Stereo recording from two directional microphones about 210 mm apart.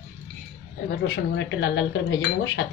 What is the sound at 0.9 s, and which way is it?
A man's voice, 55° left (ahead or behind).